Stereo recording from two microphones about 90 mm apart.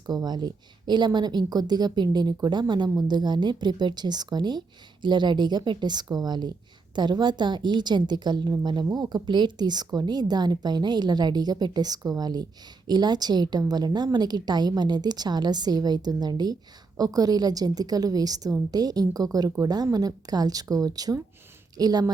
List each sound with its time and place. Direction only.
0.0 s a woman's voice: 45° right (ahead or behind)